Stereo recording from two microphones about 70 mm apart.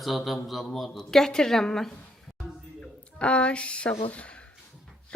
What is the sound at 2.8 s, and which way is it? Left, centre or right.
A woman's voice, centre.